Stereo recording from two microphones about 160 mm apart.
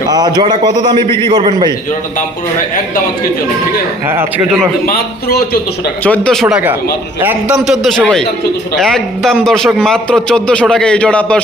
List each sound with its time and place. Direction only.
0.1 s a man's voice: 25° right (ahead or behind)
6.0 s a man's voice: 10° left (ahead or behind)